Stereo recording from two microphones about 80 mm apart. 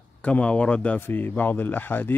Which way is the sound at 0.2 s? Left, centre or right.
Centre.